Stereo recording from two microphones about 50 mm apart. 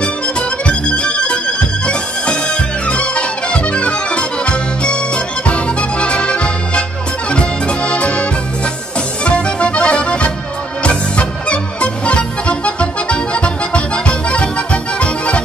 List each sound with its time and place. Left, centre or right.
0.0 s music: left
7.2 s accordion: left
9.2 s music: left